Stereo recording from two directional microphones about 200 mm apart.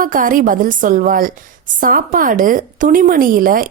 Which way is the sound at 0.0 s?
45° right (ahead or behind).